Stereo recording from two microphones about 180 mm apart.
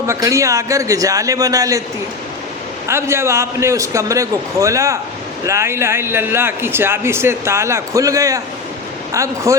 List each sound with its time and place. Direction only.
0.1 s a man's voice: 15° right (ahead or behind)
2.8 s a man's voice: 15° right (ahead or behind)